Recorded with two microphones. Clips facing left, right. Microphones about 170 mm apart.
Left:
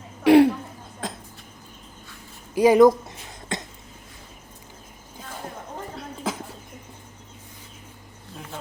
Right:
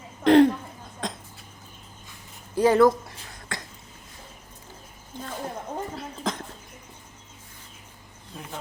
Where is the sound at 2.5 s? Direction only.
10° left (ahead or behind).